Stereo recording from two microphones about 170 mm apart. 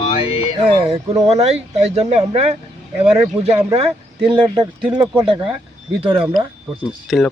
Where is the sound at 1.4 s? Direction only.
40° right (ahead or behind).